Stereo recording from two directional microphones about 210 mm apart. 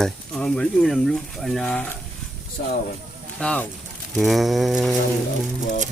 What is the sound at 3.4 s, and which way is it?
Speech, 5° left (ahead or behind).